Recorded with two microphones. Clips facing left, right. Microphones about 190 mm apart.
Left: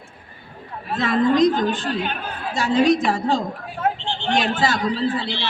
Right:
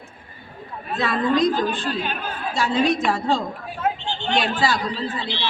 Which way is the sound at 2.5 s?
40° left (ahead or behind).